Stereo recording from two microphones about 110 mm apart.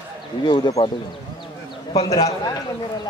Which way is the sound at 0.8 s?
65° left (ahead or behind).